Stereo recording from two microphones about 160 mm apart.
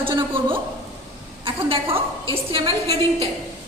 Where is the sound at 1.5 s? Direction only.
35° right (ahead or behind).